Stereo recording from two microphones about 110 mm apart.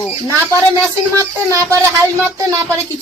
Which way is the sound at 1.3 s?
25° right (ahead or behind).